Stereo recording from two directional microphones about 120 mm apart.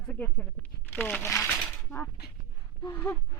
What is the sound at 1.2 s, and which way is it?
Speech, 25° left (ahead or behind).